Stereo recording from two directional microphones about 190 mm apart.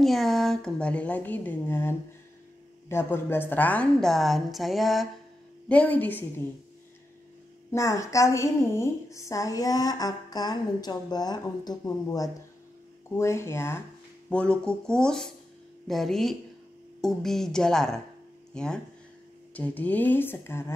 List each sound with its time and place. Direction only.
0.0 s a woman's voice: centre (ahead or behind)
7.7 s a woman's voice: 15° left (ahead or behind)